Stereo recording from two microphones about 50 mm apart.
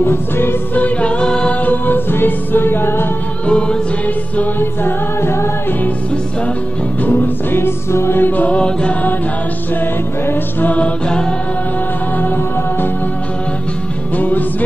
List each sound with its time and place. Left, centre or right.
0.0 s music: left
0.7 s music: left
1.2 s music: centre
1.6 s music: left
3.4 s music: left
4.6 s music: left
7.0 s music: left
7.5 s music: left
8.2 s music: left
8.5 s music: left
10.2 s music: left
10.7 s music: left
14.1 s music: left